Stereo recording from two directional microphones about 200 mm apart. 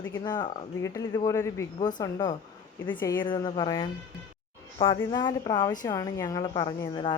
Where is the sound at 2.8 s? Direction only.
10° left (ahead or behind).